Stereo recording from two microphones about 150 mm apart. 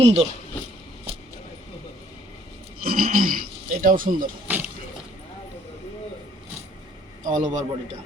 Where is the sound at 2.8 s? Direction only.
75° right (ahead or behind).